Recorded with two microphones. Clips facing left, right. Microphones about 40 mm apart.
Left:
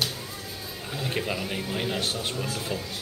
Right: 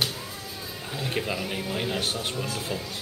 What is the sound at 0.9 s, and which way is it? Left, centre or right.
A man's voice, centre.